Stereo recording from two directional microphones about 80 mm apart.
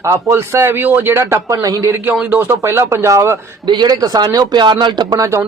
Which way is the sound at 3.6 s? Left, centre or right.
Right.